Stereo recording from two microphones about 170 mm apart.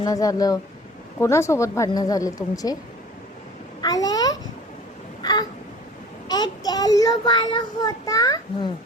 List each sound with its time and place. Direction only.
0.0 s a woman's voice: 20° left (ahead or behind)
3.8 s a sound: 20° left (ahead or behind)
6.2 s child singing: 25° left (ahead or behind)